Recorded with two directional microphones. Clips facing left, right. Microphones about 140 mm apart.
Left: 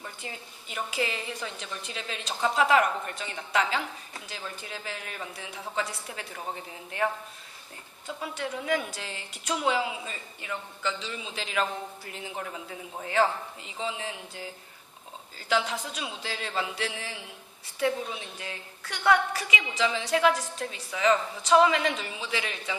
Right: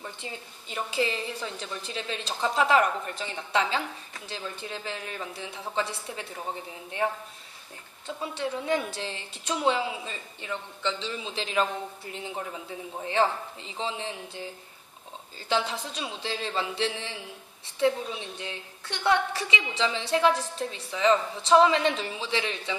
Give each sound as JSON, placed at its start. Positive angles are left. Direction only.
{"t": 0.7, "sound": "a woman's voice", "side_deg": -30}
{"t": 8.0, "sound": "a woman's voice", "side_deg": -30}
{"t": 15.4, "sound": "a woman's voice", "side_deg": -30}